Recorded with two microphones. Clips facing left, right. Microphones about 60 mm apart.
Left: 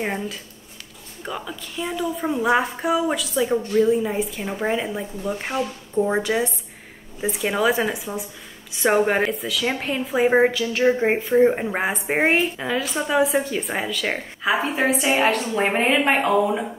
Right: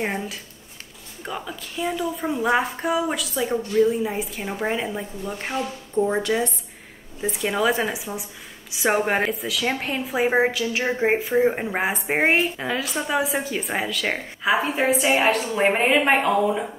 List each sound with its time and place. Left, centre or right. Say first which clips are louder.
0.0 s speech: left 1 dB; centre
6.0 s speech: even; centre
7.2 s speech: left 1 dB; centre